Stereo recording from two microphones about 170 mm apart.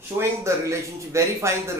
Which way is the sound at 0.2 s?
15° right (ahead or behind).